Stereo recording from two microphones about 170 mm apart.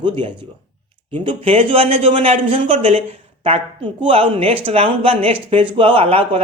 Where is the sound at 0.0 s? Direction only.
30° right (ahead or behind).